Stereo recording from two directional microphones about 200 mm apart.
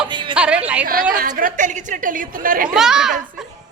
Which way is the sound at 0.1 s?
25° right (ahead or behind).